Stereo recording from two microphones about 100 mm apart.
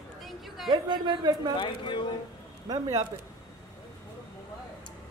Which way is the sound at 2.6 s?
40° right (ahead or behind).